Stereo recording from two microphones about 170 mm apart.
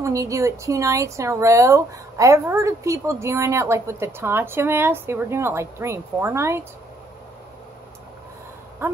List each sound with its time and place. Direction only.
0.0 s a woman's voice: 20° right (ahead or behind)